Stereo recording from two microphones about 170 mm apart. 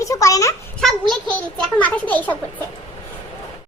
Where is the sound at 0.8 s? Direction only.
Centre (ahead or behind).